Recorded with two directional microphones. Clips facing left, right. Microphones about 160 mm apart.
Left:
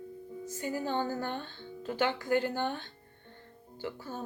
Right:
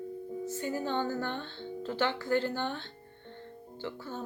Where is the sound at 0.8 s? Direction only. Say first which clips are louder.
Even; 10° left (ahead or behind).